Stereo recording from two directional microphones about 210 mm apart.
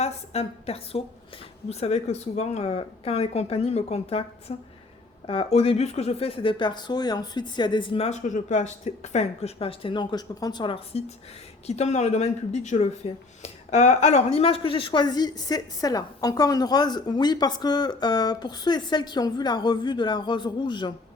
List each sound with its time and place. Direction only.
0.0 s a woman's voice: 30° left (ahead or behind)